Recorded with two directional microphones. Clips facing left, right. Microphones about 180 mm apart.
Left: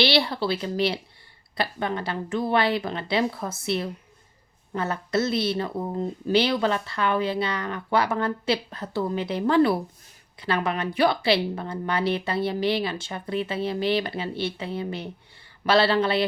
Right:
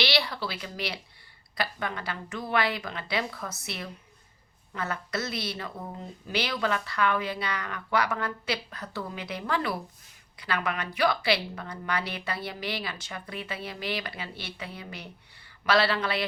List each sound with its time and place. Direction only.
0.0 s speech: 30° left (ahead or behind)